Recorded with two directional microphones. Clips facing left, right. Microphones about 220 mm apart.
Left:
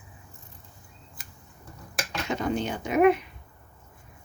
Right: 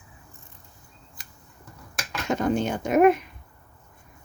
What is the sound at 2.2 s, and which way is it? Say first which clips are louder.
Speech: right 4 dB; 50° right (ahead or behind).